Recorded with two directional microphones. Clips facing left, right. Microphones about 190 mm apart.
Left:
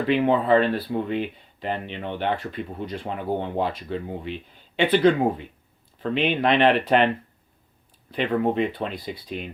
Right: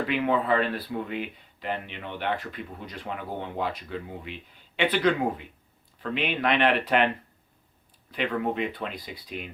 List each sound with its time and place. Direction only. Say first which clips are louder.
0.1 s speech: left 7 dB; 30° left (ahead or behind)
8.1 s speech: left 5 dB; 30° left (ahead or behind)